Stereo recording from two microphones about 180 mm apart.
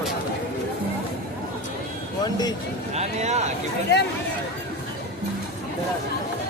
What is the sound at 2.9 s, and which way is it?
Speech, 40° right (ahead or behind).